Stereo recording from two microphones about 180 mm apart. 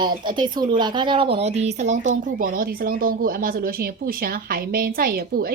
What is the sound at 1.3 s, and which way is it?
Speech, 35° right (ahead or behind).